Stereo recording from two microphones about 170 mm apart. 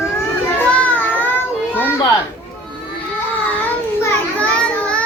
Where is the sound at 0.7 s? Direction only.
10° left (ahead or behind).